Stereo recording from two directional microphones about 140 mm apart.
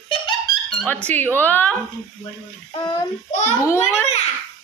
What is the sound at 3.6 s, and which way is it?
Speech, 20° left (ahead or behind).